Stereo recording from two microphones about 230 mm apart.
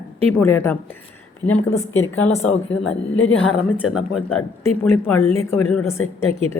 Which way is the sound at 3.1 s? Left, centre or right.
Left.